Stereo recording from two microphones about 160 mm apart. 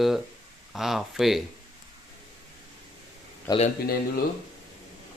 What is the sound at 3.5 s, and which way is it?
Speech, 20° left (ahead or behind).